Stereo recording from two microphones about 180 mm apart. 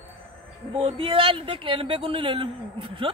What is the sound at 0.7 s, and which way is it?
Speech, 30° right (ahead or behind).